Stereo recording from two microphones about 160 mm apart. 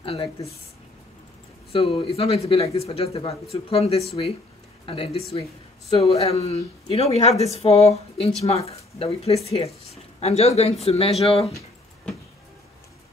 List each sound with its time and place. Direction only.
0.0 s speech: 35° left (ahead or behind)
1.7 s speech: 35° left (ahead or behind)